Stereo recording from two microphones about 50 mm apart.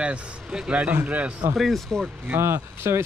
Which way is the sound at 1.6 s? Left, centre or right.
Centre.